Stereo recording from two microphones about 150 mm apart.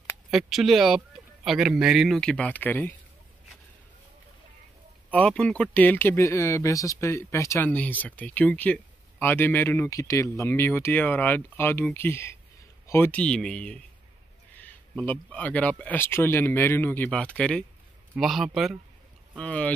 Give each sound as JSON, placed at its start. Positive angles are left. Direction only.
{"t": 0.3, "sound": "speech", "side_deg": 0}
{"t": 5.1, "sound": "speech", "side_deg": 5}